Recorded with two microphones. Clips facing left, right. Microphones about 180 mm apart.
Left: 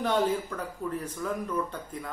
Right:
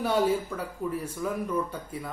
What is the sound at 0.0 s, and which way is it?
A man's voice, 10° right (ahead or behind).